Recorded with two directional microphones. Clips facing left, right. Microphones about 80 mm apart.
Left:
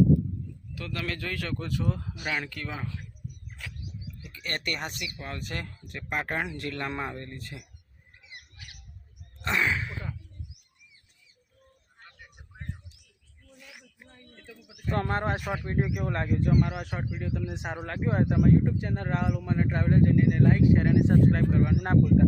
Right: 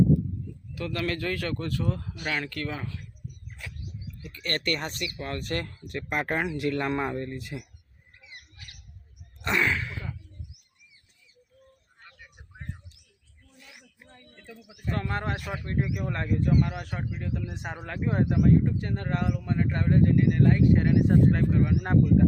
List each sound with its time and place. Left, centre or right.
0.8 s speech: centre
4.2 s speech: centre
9.4 s a sound: centre
9.7 s a sound: centre
14.3 s bird: centre
14.9 s speech: left
15.2 s speech: centre